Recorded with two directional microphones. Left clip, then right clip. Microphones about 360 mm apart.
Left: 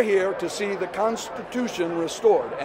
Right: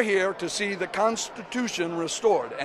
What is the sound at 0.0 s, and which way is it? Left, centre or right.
Speech, right.